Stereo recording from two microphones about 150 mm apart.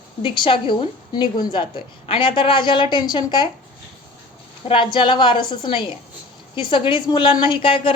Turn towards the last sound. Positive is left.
turn(degrees=35)  # may be behind; listen again after turning